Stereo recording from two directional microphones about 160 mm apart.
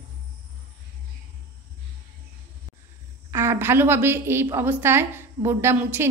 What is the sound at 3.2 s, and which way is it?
A woman's voice, 15° right (ahead or behind).